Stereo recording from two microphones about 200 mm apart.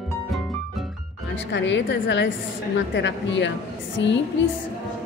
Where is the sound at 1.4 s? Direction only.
60° left (ahead or behind).